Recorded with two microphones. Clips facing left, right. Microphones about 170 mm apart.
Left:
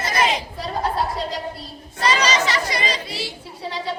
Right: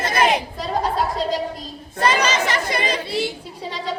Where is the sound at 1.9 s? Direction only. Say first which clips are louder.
Right 1 dB; 55° right (ahead or behind).